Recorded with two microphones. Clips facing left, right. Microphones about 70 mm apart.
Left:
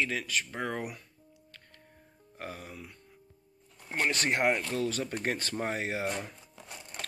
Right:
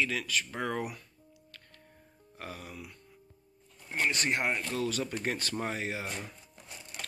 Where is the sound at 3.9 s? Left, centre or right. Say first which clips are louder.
Left 1 dB; left.